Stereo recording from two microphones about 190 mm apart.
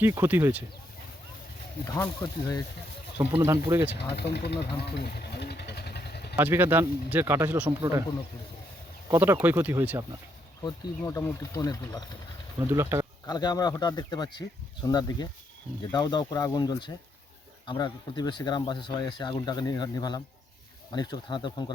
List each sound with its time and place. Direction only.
0.0 s speech: 10° right (ahead or behind)
2.2 s speech: 20° left (ahead or behind)
3.2 s speech: 15° right (ahead or behind)
3.9 s speech: 60° left (ahead or behind)
6.3 s speech: 10° right (ahead or behind)
9.0 s speech: 15° right (ahead or behind)
10.6 s speech: 20° left (ahead or behind)
12.5 s speech: 15° right (ahead or behind)
13.2 s speech: 20° left (ahead or behind)